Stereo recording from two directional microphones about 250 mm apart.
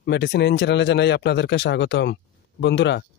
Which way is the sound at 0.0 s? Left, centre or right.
Left.